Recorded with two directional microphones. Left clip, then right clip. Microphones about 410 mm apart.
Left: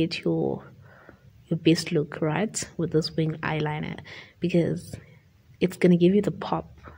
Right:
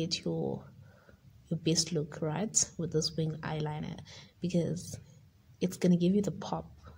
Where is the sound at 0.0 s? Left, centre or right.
Left.